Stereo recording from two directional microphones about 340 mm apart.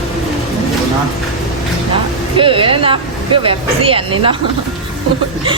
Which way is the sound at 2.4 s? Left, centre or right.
Centre.